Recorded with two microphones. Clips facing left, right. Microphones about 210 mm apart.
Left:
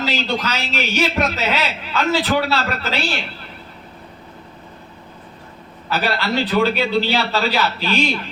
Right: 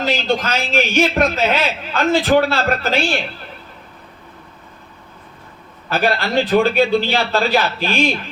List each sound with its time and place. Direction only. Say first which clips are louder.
0.0 s a man's voice: right 3 dB; 50° right (ahead or behind)
5.9 s a man's voice: right 3 dB; 50° right (ahead or behind)